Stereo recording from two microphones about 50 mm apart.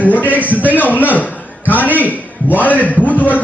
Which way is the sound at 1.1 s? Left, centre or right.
Left.